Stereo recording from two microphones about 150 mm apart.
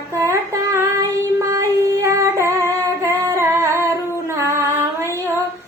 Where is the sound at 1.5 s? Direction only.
20° right (ahead or behind).